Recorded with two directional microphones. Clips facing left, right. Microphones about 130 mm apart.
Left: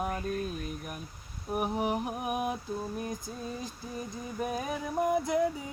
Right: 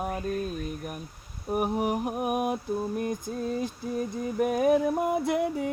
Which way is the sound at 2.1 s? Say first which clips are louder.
Right 5 dB; 50° right (ahead or behind).